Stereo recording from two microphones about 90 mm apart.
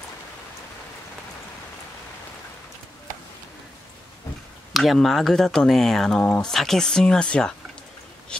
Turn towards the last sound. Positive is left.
turn(degrees=10)  # may be behind; listen again after turning